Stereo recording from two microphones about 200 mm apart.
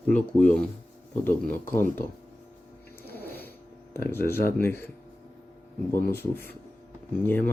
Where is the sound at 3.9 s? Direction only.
10° left (ahead or behind).